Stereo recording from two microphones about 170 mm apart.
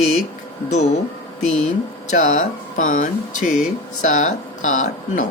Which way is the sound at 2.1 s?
45° left (ahead or behind).